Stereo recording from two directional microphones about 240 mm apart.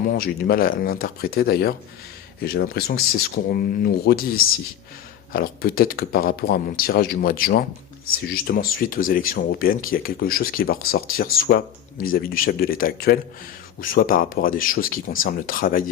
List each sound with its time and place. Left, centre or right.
0.1 s speech: left